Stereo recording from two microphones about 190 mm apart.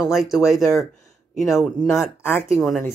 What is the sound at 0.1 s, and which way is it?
Speech, centre (ahead or behind).